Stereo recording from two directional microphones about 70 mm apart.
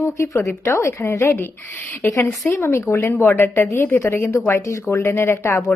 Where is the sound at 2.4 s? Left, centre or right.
Left.